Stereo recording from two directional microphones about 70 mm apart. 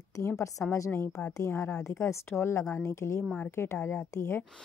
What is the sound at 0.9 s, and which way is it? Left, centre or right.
A woman's voice, left.